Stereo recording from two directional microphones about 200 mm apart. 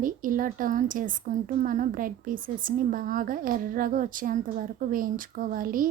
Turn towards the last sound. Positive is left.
turn(degrees=-45)  # may be behind; listen again after turning